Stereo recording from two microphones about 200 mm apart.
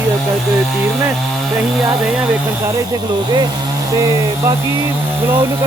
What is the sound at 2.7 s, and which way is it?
Speech, 20° right (ahead or behind).